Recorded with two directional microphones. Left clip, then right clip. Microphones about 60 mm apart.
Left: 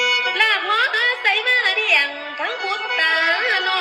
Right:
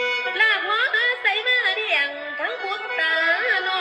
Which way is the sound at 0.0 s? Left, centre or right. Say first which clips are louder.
Left 3 dB; right.